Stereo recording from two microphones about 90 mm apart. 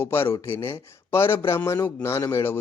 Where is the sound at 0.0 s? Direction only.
25° left (ahead or behind).